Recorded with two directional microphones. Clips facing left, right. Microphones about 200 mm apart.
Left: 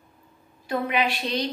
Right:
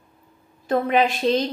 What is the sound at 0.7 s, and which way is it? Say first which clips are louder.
Speech: right 6 dB; 45° right (ahead or behind).